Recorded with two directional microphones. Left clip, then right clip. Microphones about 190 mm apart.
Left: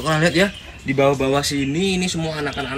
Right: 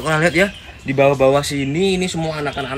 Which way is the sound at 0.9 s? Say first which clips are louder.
Right 4 dB; 35° right (ahead or behind).